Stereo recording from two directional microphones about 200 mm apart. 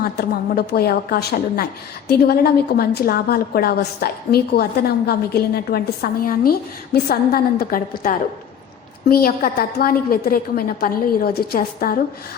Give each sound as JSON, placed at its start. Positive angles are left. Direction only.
{"t": 0.0, "sound": "a woman's voice", "side_deg": 50}